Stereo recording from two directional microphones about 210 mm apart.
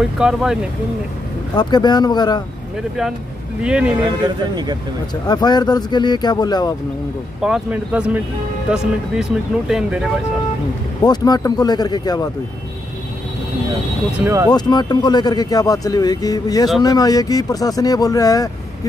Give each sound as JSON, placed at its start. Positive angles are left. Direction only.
{"t": 0.0, "sound": "speech", "side_deg": -5}
{"t": 1.5, "sound": "speech", "side_deg": 20}
{"t": 3.6, "sound": "speech", "side_deg": -5}
{"t": 5.2, "sound": "speech", "side_deg": 20}
{"t": 7.4, "sound": "speech", "side_deg": -5}
{"t": 11.0, "sound": "speech", "side_deg": 20}
{"t": 14.2, "sound": "speech", "side_deg": -15}
{"t": 14.5, "sound": "speech", "side_deg": 20}